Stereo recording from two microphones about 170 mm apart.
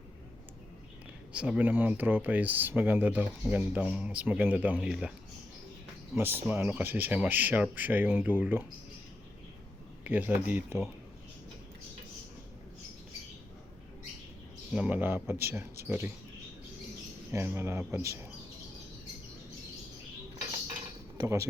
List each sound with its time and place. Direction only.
1.3 s speech: 5° right (ahead or behind)
6.5 s speech: 10° right (ahead or behind)
10.0 s speech: 10° right (ahead or behind)
14.7 s speech: 10° right (ahead or behind)
17.3 s speech: 15° right (ahead or behind)
21.2 s speech: 20° right (ahead or behind)